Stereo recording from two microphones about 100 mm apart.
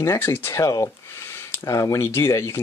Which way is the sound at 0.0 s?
25° left (ahead or behind).